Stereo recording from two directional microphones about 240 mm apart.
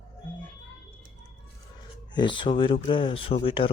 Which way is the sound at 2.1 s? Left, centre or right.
Centre.